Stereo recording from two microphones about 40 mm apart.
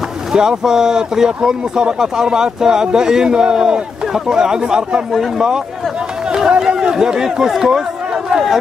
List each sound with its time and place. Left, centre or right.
0.3 s speech: centre
6.2 s run: centre
6.6 s speech: centre